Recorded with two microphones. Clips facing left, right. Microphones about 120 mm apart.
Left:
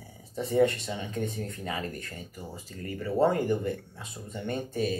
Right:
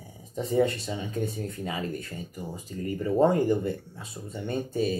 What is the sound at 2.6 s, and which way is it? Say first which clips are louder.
Speech: right 5 dB; 15° right (ahead or behind).